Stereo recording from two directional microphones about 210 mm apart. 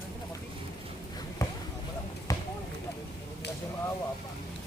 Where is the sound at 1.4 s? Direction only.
15° left (ahead or behind).